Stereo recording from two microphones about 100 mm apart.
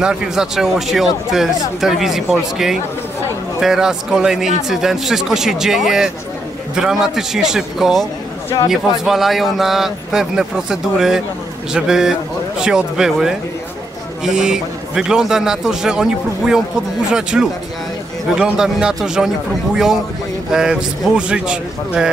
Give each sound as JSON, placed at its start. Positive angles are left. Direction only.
{"t": 0.0, "sound": "a man's voice", "side_deg": -5}